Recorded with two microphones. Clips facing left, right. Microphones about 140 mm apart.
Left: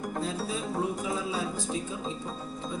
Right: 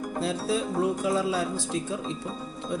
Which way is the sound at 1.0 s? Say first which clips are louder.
Right 6 dB; 90° right.